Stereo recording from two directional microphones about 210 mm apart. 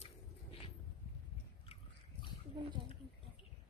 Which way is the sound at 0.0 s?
25° left (ahead or behind).